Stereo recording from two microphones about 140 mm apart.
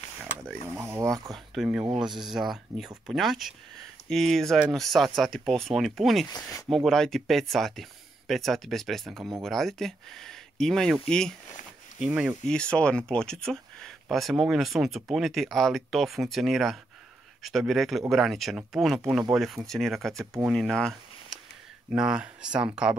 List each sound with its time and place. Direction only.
0.7 s a sound: 20° right (ahead or behind)
1.3 s speech: centre (ahead or behind)
12.0 s speech: 10° right (ahead or behind)
12.4 s speech: 5° left (ahead or behind)